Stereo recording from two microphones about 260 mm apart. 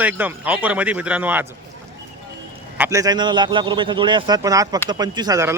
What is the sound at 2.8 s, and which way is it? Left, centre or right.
A man's voice, centre.